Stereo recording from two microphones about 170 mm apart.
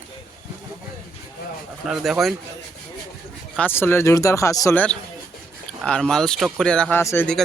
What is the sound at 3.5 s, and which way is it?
Speech, 10° left (ahead or behind).